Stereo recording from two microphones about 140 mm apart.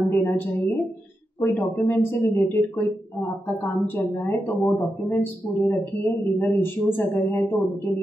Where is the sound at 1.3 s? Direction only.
10° left (ahead or behind).